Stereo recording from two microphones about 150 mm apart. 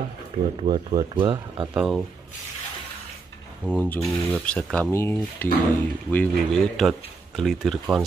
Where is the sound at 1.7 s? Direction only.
5° right (ahead or behind).